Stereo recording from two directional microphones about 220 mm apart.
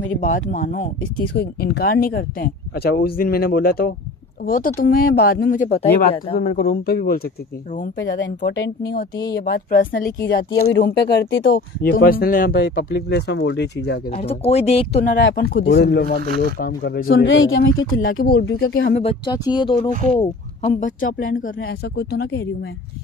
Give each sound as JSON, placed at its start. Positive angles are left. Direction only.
{"t": 0.2, "sound": "speech", "side_deg": 35}
{"t": 1.0, "sound": "speech", "side_deg": 50}
{"t": 8.0, "sound": "speech", "side_deg": 55}
{"t": 14.1, "sound": "speech", "side_deg": 25}
{"t": 15.1, "sound": "speech", "side_deg": 50}
{"t": 17.8, "sound": "speech", "side_deg": 40}
{"t": 18.9, "sound": "speech", "side_deg": 25}
{"t": 20.2, "sound": "speech", "side_deg": 30}